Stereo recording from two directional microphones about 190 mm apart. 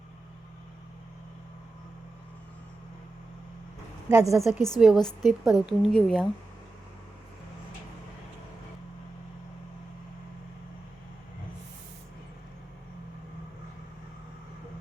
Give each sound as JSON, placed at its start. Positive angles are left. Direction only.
{"t": 4.1, "sound": "a woman's voice", "side_deg": -15}
{"t": 4.8, "sound": "a woman's voice", "side_deg": 0}